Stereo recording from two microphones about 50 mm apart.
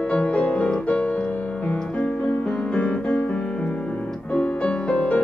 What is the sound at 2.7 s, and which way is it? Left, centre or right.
Music, left.